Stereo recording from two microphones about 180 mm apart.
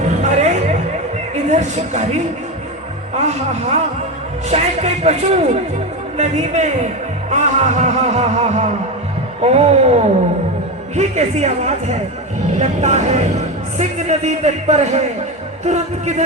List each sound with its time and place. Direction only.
0.2 s a sound: 40° right (ahead or behind)
1.5 s speech: 40° right (ahead or behind)
3.2 s speech: 40° right (ahead or behind)